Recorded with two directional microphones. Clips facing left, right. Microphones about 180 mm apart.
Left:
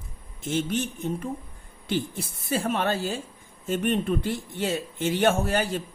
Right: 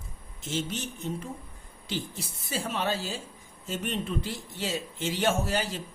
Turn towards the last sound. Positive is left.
turn(degrees=55)  # may be behind; listen again after turning